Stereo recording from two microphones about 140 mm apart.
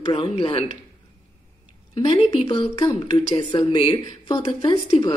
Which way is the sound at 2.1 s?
35° left (ahead or behind).